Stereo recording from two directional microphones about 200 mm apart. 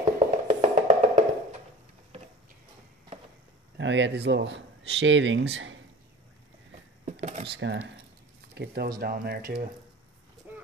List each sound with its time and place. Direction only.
0.2 s music: 35° right (ahead or behind)
3.7 s speech: 60° right (ahead or behind)
7.1 s a sound: 35° right (ahead or behind)
7.5 s speech: 65° right (ahead or behind)
8.5 s speech: 55° right (ahead or behind)
10.4 s a sound: 5° right (ahead or behind)